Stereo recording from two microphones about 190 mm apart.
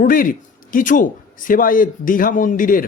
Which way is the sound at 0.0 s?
45° left (ahead or behind).